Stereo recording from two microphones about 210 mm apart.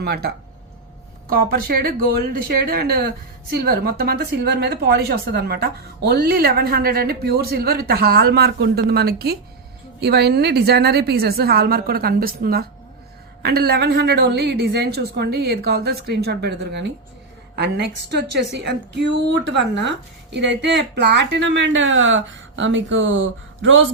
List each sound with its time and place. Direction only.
0.0 s a woman's voice: 50° right (ahead or behind); by 23.9 s 65° right (ahead or behind)